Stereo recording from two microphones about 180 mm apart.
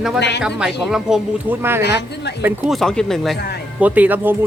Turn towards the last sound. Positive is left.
turn(degrees=-10)  # may be behind; listen again after turning